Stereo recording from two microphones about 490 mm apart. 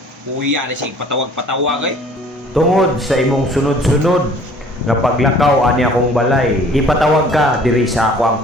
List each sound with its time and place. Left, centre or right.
0.4 s speech: right
2.6 s a man's voice: centre